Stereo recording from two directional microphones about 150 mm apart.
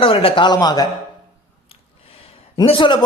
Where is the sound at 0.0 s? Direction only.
35° left (ahead or behind).